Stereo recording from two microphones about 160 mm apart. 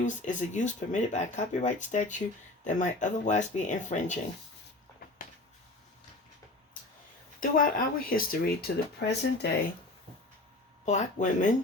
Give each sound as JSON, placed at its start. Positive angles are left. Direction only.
{"t": 0.0, "sound": "speech", "side_deg": 50}
{"t": 7.3, "sound": "speech", "side_deg": 60}
{"t": 10.8, "sound": "speech", "side_deg": 50}